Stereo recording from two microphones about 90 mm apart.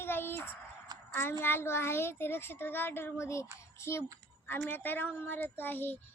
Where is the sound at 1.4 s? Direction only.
25° left (ahead or behind).